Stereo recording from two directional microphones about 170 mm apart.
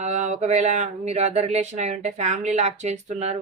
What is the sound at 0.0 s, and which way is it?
Speech, 45° right (ahead or behind).